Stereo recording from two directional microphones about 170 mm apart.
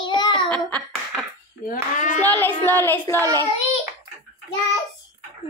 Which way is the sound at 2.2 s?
10° left (ahead or behind).